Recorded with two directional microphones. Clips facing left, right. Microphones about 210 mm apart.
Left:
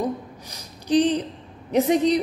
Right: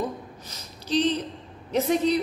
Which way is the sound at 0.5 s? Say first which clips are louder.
Left 6 dB; 15° left (ahead or behind).